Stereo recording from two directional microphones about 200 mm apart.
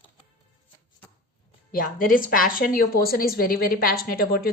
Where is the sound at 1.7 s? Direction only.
45° left (ahead or behind).